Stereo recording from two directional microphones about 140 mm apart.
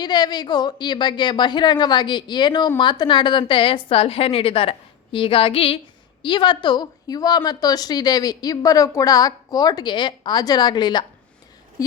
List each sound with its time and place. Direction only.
0.0 s a woman's voice: 30° left (ahead or behind)